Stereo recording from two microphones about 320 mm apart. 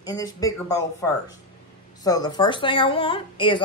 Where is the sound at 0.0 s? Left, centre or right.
Centre.